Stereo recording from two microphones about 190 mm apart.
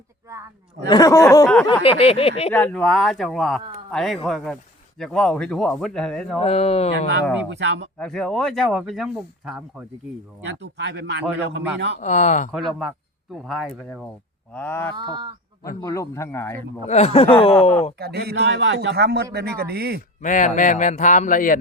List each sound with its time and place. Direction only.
0.9 s a man's voice: 20° left (ahead or behind)
1.7 s speech: 30° left (ahead or behind)
2.5 s speech: 5° left (ahead or behind)
6.4 s speech: 30° left (ahead or behind)
7.5 s a man's voice: 65° right (ahead or behind)
7.9 s speech: 5° left (ahead or behind)
10.4 s a man's voice: 65° right (ahead or behind)
11.9 s speech: 40° left (ahead or behind)
12.5 s a man's voice: centre (ahead or behind)
14.9 s speech: 25° right (ahead or behind)
15.8 s a man's voice: 15° left (ahead or behind)
16.8 s speech: 35° left (ahead or behind)
18.0 s a man's voice: 55° right (ahead or behind)
20.2 s speech: 40° left (ahead or behind)